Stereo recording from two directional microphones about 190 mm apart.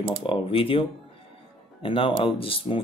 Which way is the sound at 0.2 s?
30° left (ahead or behind).